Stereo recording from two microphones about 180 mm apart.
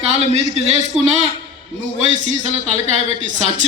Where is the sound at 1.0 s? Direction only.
5° right (ahead or behind).